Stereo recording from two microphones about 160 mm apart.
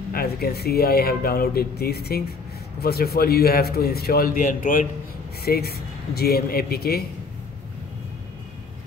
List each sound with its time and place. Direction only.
0.1 s speech: 70° left (ahead or behind); by 4.8 s 55° left (ahead or behind)
5.4 s speech: 75° left (ahead or behind)